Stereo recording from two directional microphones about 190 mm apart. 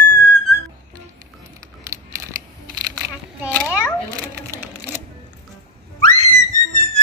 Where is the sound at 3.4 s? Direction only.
10° right (ahead or behind).